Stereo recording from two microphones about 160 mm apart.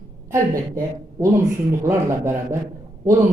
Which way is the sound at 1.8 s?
15° right (ahead or behind).